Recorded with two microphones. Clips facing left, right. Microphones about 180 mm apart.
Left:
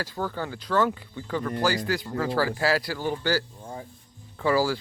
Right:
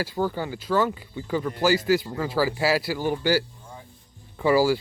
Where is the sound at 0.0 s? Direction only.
10° right (ahead or behind).